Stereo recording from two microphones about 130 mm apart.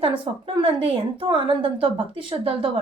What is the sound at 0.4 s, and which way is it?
A woman's voice, 45° right (ahead or behind).